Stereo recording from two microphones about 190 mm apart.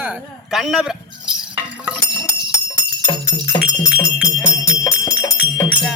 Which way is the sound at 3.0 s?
15° left (ahead or behind).